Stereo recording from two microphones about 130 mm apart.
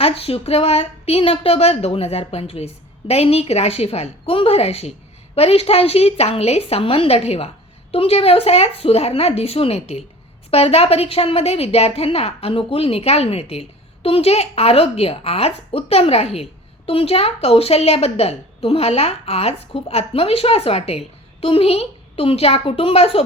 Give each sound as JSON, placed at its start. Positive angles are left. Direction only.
{"t": 0.0, "sound": "a woman's voice", "side_deg": 45}